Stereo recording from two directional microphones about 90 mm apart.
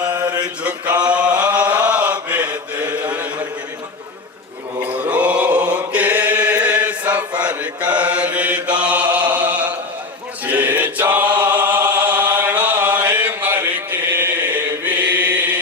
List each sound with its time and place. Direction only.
0.3 s mantra: 50° right (ahead or behind)
0.6 s mantra: 15° right (ahead or behind)
4.8 s chant: 15° right (ahead or behind)